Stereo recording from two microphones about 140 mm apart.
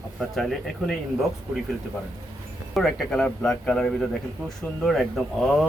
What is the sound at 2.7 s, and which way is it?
Speech, 5° left (ahead or behind).